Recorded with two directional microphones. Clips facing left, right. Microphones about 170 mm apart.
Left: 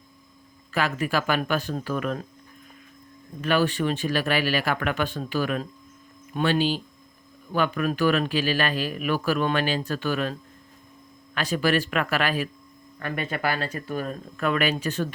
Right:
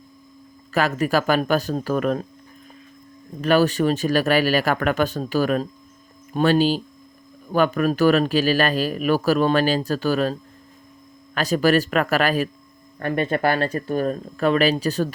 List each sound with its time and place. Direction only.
0.7 s speech: 40° right (ahead or behind)
3.4 s speech: 40° right (ahead or behind)
11.3 s speech: 40° right (ahead or behind)